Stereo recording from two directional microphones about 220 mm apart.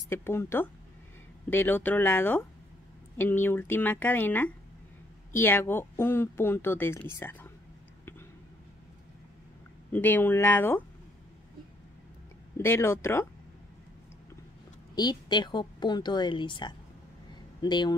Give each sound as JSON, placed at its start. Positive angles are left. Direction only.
{"t": 0.1, "sound": "speech", "side_deg": 10}
{"t": 9.9, "sound": "speech", "side_deg": 10}
{"t": 12.5, "sound": "speech", "side_deg": 10}
{"t": 15.0, "sound": "a woman's voice", "side_deg": 20}